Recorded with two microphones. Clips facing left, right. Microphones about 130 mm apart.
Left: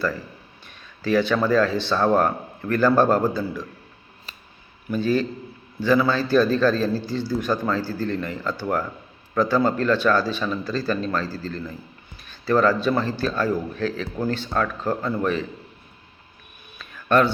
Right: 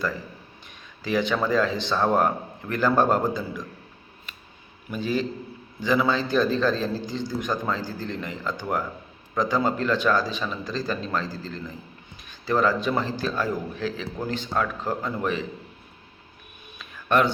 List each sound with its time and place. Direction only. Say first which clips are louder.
1.0 s a man's voice: left 4 dB; 15° right (ahead or behind)
4.9 s a man's voice: left 4 dB; 15° right (ahead or behind)
16.7 s a sound: left 3 dB; 15° right (ahead or behind)